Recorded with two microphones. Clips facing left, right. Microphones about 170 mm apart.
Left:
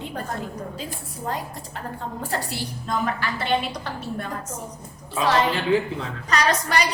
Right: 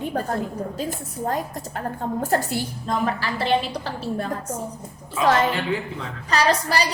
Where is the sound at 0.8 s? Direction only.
45° right (ahead or behind).